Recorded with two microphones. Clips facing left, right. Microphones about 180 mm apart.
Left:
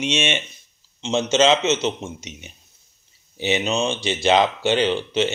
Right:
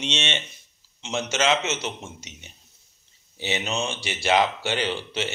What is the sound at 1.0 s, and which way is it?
A man's voice, 25° left (ahead or behind).